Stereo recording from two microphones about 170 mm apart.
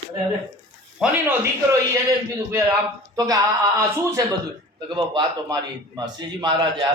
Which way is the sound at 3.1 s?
20° right (ahead or behind).